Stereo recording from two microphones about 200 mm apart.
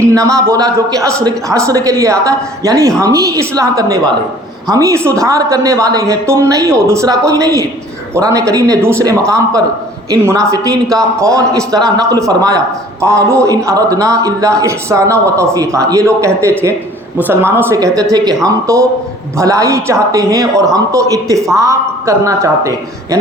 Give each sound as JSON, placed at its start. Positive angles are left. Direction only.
{"t": 0.1, "sound": "a man's voice", "side_deg": -15}